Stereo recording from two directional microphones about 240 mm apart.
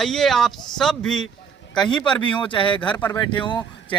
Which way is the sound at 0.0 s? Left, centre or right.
Centre.